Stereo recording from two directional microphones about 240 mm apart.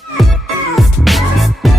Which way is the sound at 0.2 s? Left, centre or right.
Centre.